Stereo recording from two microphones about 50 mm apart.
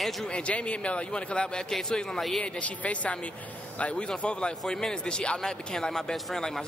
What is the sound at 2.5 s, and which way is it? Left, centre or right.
A man's voice, left.